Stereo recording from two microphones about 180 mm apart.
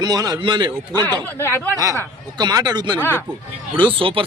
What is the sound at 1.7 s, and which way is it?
A man's voice, 20° right (ahead or behind).